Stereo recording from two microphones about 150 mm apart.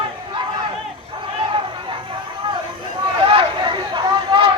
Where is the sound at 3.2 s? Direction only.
35° right (ahead or behind).